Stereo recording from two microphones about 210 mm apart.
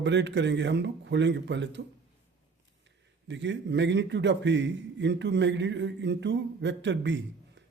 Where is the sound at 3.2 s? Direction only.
60° right (ahead or behind).